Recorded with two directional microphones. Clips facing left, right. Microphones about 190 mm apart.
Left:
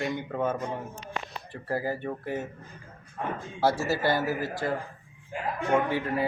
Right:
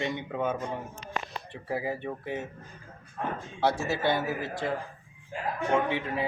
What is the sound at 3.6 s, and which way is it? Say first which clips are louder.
A man's voice: left 1 dB; 5° left (ahead or behind).